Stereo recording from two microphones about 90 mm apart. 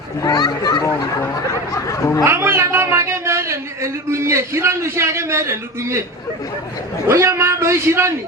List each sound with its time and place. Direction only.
0.2 s a child's voice: 50° left (ahead or behind)
1.7 s speech: 35° left (ahead or behind)
2.2 s speech: 30° right (ahead or behind)
7.1 s a man's voice: 30° right (ahead or behind)